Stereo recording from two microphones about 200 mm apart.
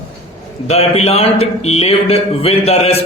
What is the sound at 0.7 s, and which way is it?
A man's voice, 30° left (ahead or behind).